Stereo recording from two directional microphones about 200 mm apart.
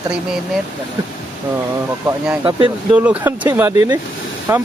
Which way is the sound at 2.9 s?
5° right (ahead or behind).